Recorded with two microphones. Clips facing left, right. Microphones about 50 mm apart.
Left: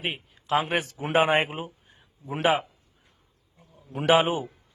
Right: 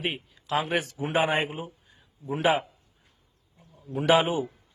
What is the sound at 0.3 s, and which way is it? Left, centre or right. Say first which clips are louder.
A man's voice: left 3 dB; left.